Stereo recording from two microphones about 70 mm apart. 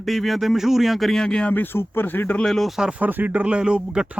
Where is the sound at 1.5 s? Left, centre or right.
Left.